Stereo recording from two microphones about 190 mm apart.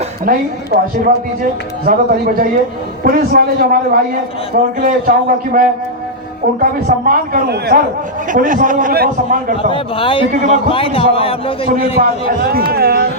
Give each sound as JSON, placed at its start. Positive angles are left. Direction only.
{"t": 0.3, "sound": "a man's voice", "side_deg": -50}
{"t": 8.3, "sound": "a man's voice", "side_deg": -45}
{"t": 9.6, "sound": "a man's voice", "side_deg": 30}
{"t": 11.9, "sound": "a man's voice", "side_deg": -55}